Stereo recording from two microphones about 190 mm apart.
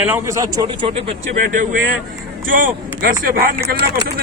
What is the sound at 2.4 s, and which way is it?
Speech, 45° right (ahead or behind).